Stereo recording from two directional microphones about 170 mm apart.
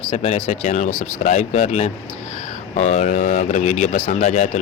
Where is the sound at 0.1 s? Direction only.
40° left (ahead or behind).